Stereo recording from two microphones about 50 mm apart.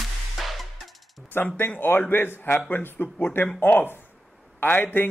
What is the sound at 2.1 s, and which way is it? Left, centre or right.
Speech, left.